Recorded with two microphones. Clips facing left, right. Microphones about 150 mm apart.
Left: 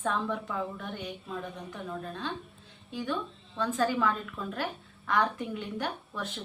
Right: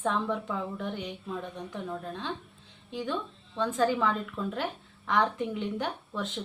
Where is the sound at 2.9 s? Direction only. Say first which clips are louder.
Even; 20° right (ahead or behind).